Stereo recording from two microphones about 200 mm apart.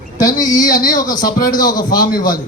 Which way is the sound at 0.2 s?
20° left (ahead or behind).